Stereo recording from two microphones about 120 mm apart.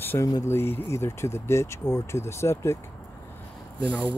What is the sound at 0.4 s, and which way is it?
Speech, 20° left (ahead or behind).